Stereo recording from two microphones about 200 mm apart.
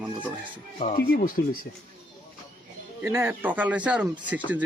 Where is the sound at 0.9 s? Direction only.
50° left (ahead or behind).